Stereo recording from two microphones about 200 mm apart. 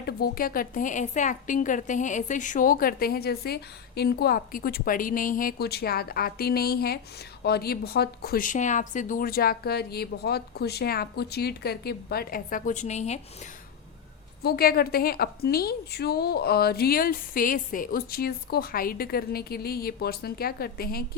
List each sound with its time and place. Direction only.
0.0 s a woman's voice: 50° left (ahead or behind)
14.4 s a woman's voice: 50° left (ahead or behind)